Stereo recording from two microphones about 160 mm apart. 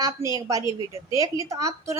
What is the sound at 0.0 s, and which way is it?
A woman's voice, 20° right (ahead or behind).